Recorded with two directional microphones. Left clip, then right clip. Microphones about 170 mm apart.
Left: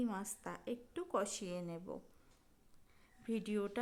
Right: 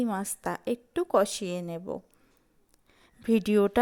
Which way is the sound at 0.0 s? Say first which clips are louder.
Right 12 dB; 35° right (ahead or behind).